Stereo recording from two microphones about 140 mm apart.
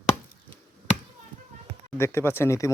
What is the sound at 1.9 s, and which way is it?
Speech, 15° left (ahead or behind).